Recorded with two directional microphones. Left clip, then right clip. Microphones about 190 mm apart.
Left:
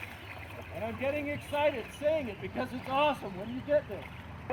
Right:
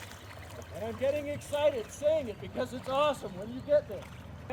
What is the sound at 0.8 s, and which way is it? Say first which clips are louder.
Speech: right 2 dB; 30° right (ahead or behind).